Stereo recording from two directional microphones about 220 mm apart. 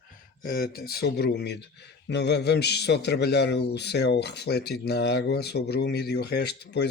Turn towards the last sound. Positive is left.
turn(degrees=50)  # may be behind; listen again after turning